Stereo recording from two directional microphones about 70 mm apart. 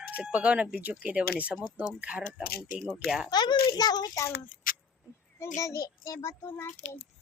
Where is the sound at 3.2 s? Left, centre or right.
Left.